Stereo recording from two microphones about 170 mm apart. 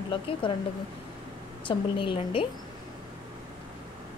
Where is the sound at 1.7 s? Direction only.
30° left (ahead or behind).